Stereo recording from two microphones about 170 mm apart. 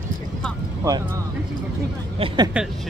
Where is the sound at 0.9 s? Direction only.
20° right (ahead or behind).